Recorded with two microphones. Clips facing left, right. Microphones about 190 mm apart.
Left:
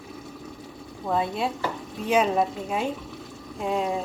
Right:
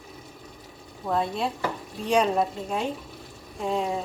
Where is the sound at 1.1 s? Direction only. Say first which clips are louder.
Left 1 dB; centre (ahead or behind).